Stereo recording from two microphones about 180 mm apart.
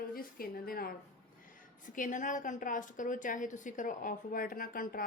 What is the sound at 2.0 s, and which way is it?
A woman's voice, 45° left (ahead or behind).